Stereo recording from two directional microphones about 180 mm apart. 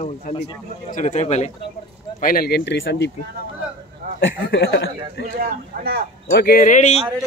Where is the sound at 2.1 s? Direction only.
55° left (ahead or behind); by 3.1 s 75° left (ahead or behind).